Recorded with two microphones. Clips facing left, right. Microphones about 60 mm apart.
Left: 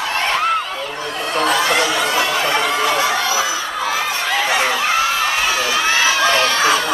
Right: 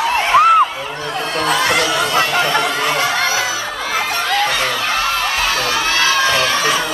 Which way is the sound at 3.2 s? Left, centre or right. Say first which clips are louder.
Right 1 dB; right.